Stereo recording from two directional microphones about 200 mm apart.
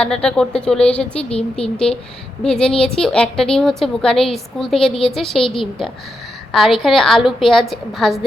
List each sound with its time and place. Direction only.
0.0 s a woman's voice: 5° left (ahead or behind)
1.2 s speech: 30° left (ahead or behind)
2.4 s a woman's voice: 5° left (ahead or behind)